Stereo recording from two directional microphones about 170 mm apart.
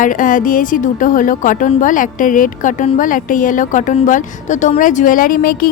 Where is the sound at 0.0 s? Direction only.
50° left (ahead or behind).